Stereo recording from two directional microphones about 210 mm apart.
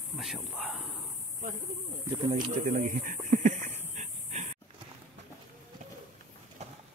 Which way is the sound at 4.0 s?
35° right (ahead or behind).